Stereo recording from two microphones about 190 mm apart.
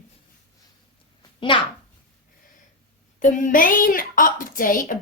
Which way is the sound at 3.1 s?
45° left (ahead or behind).